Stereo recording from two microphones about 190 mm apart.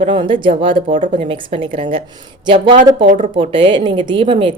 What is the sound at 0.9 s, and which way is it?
Speech, 45° right (ahead or behind).